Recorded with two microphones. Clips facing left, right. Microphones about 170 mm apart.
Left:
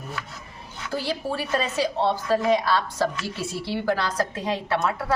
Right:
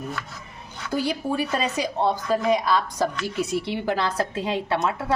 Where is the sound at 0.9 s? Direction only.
15° right (ahead or behind).